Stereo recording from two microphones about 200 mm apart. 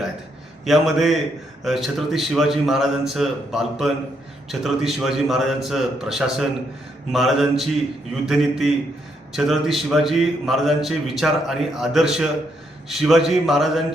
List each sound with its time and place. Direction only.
0.6 s a man's voice: centre (ahead or behind)